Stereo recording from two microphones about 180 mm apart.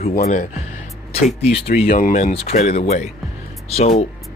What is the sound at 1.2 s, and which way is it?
Speech, 35° left (ahead or behind).